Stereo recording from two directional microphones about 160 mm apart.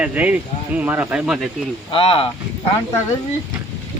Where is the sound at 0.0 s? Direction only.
10° right (ahead or behind).